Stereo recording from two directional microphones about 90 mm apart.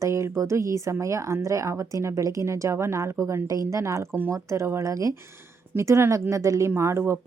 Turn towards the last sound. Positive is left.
turn(degrees=-30)  # may be behind; listen again after turning